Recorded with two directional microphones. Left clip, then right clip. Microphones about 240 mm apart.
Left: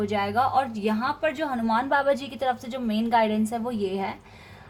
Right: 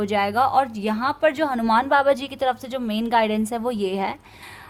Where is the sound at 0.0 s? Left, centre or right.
Right.